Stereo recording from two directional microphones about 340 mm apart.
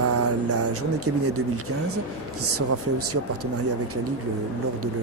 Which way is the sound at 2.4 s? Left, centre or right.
Right.